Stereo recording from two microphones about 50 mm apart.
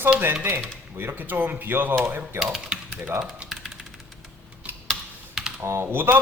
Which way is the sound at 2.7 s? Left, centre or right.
Centre.